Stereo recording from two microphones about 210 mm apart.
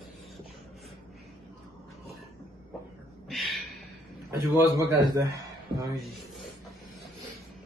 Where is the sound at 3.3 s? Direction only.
Centre (ahead or behind).